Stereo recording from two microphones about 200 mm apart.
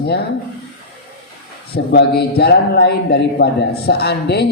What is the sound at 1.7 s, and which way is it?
A man's voice, 55° left (ahead or behind).